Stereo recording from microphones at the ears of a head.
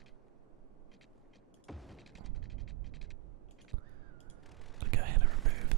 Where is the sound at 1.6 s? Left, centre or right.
Centre.